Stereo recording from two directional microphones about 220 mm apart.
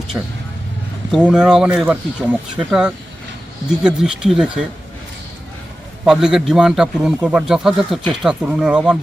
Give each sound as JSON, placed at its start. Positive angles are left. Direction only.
{"t": 0.1, "sound": "a man's voice", "side_deg": -5}
{"t": 6.1, "sound": "a man's voice", "side_deg": 0}